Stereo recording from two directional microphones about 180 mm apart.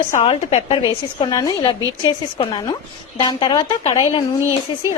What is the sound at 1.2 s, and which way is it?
A woman's voice, 20° left (ahead or behind).